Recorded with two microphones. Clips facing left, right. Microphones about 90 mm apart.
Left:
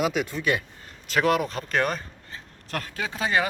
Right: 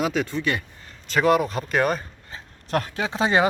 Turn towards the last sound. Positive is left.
turn(degrees=-25)  # may be behind; listen again after turning